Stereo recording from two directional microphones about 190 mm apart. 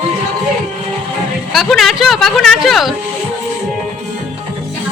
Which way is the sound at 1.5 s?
Centre (ahead or behind).